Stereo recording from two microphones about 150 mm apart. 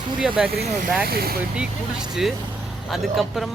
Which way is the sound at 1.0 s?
90° right.